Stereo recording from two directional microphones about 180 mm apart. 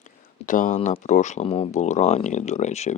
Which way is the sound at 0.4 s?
45° left (ahead or behind).